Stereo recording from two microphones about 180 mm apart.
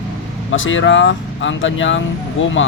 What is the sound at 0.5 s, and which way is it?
Speech, 90° left.